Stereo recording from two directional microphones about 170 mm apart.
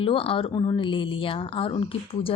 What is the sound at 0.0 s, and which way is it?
Speech, 30° left (ahead or behind).